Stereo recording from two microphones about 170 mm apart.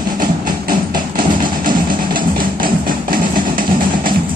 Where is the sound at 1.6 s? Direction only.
25° right (ahead or behind).